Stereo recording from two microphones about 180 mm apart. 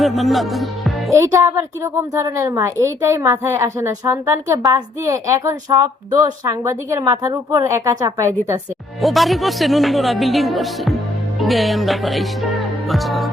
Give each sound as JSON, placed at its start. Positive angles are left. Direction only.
{"t": 0.0, "sound": "speech", "side_deg": 0}
{"t": 1.1, "sound": "a woman's voice", "side_deg": -15}
{"t": 9.0, "sound": "speech", "side_deg": 0}
{"t": 11.3, "sound": "music", "side_deg": 0}